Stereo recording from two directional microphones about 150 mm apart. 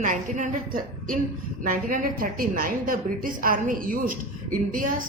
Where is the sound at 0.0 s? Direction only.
60° right (ahead or behind).